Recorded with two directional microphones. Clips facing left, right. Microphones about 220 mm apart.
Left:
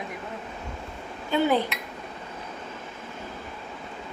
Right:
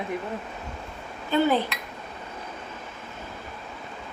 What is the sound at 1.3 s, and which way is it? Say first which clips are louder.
Speech: right 1 dB; 15° left (ahead or behind).